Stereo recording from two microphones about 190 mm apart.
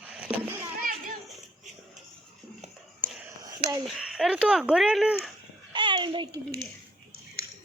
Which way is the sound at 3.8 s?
Centre (ahead or behind).